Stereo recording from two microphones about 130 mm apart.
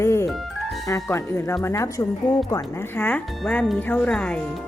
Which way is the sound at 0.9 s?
25° left (ahead or behind).